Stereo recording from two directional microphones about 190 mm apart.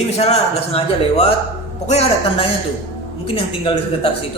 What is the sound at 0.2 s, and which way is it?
A man's voice, 35° left (ahead or behind).